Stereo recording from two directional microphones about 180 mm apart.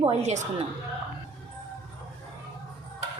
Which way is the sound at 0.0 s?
35° right (ahead or behind).